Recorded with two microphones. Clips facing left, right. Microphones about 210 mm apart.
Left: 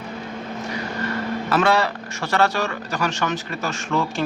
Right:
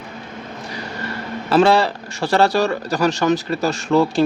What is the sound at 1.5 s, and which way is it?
Speech, 30° right (ahead or behind).